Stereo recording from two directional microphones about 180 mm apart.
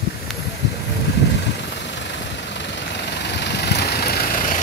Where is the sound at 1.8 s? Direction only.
75° left (ahead or behind).